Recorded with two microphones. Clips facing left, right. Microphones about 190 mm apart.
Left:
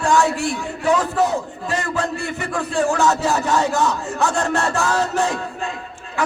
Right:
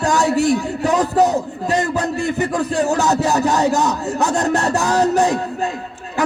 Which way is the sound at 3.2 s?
40° right (ahead or behind).